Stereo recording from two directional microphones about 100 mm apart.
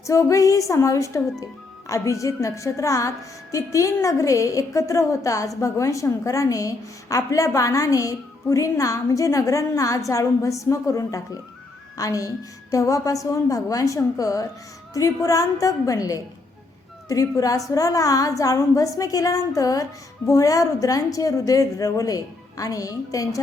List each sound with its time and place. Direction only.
0.0 s a woman's voice: 30° left (ahead or behind)